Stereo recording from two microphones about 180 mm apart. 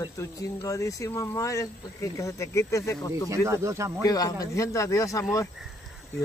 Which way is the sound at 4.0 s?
20° left (ahead or behind).